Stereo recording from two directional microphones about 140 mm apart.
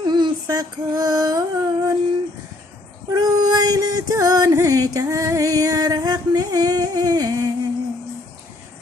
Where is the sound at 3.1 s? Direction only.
25° right (ahead or behind).